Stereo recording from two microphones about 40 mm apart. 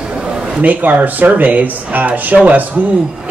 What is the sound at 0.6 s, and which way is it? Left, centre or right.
Speech, right.